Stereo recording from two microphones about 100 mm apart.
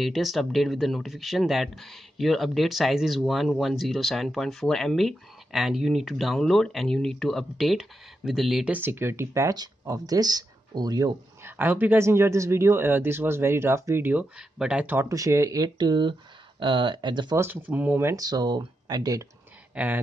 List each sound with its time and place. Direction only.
0.0 s speech: centre (ahead or behind)
8.7 s speech: 20° right (ahead or behind); by 11.1 s 40° right (ahead or behind)
11.4 s speech: 20° right (ahead or behind)
14.6 s speech: 10° right (ahead or behind)
15.0 s speech: 35° right (ahead or behind); by 17.4 s 50° right (ahead or behind)
17.4 s speech: 20° right (ahead or behind)
18.1 s speech: 40° right (ahead or behind)
19.7 s speech: 15° right (ahead or behind)